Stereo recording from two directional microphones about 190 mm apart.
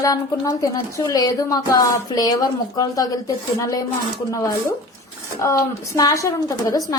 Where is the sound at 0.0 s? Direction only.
20° left (ahead or behind).